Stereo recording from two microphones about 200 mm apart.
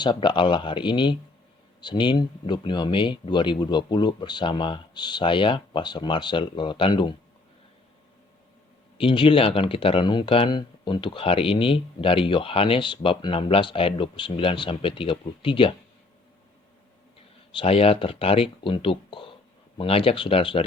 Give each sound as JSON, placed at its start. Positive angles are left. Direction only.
{"t": 0.0, "sound": "speech", "side_deg": 20}
{"t": 9.0, "sound": "speech", "side_deg": 25}
{"t": 17.5, "sound": "speech", "side_deg": 25}